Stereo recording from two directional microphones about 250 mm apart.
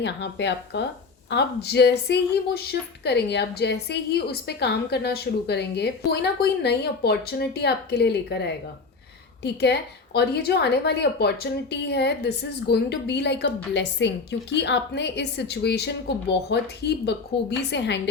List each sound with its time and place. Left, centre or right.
0.0 s a woman's voice: left